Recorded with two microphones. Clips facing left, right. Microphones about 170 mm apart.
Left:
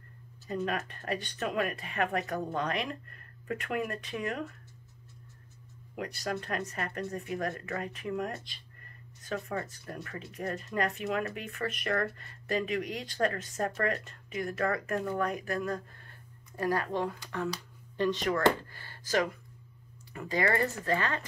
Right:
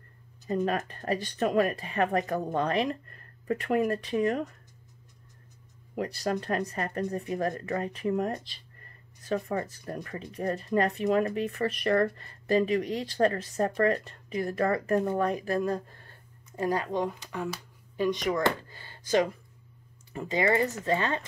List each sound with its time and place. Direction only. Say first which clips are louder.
0.7 s speech: right 4 dB; 35° right (ahead or behind)
5.9 s speech: right 5 dB; 35° right (ahead or behind)
16.5 s speech: right 2 dB; 20° right (ahead or behind)